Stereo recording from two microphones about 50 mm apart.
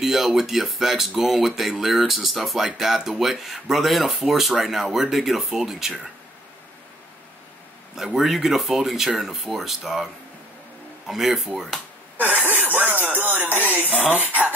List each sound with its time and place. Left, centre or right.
0.0 s speech: centre
7.9 s speech: centre
11.1 s speech: centre
12.4 s speech: right